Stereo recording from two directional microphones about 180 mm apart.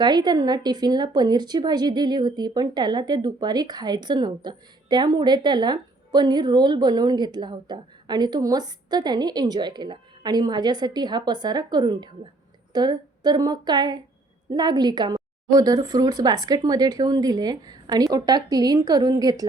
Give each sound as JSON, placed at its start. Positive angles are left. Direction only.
{"t": 0.0, "sound": "speech", "side_deg": -25}